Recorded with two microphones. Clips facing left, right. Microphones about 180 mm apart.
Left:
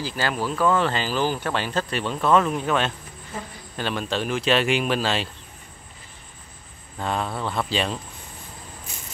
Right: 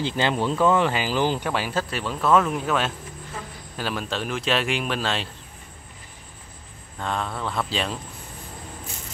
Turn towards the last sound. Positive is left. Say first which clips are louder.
# left 2 dB
turn(degrees=0)  # may be behind; listen again after turning